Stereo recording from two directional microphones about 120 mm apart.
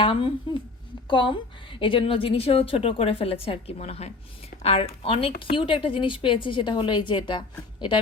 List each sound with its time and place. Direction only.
0.0 s a woman's voice: 45° left (ahead or behind)